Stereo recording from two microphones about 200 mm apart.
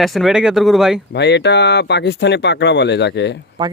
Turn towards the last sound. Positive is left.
turn(degrees=60)  # may be behind; listen again after turning